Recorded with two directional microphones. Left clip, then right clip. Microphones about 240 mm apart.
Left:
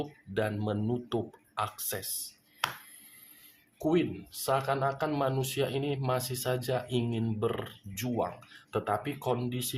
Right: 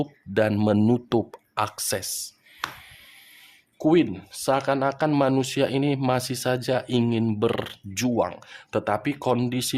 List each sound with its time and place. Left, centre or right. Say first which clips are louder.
0.0 s speech: right 9 dB; right
3.8 s speech: right 8 dB; right